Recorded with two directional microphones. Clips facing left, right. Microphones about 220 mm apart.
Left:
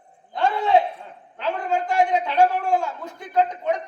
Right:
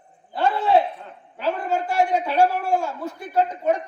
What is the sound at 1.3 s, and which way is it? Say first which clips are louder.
A man's voice: right 1 dB; 10° right (ahead or behind).